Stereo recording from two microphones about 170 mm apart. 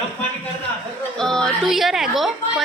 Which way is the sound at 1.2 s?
5° left (ahead or behind).